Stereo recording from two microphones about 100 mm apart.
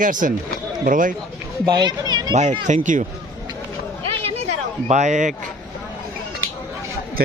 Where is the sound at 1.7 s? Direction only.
45° right (ahead or behind).